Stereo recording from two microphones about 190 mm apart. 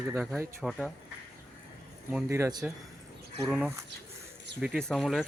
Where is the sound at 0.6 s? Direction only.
5° left (ahead or behind).